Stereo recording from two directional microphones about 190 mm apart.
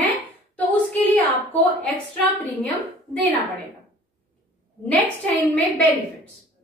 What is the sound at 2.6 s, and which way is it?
Speech, 10° left (ahead or behind).